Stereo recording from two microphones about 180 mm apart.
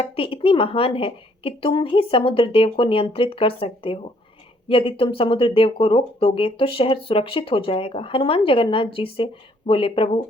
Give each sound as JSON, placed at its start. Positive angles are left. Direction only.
{"t": 0.0, "sound": "a woman's voice", "side_deg": 30}